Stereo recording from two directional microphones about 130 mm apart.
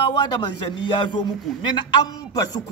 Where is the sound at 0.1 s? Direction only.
35° left (ahead or behind).